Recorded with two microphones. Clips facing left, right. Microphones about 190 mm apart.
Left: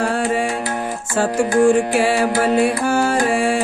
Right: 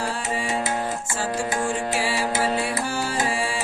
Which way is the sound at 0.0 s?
60° left (ahead or behind).